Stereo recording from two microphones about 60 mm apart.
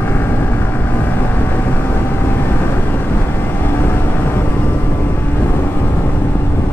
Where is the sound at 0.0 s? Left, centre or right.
Left.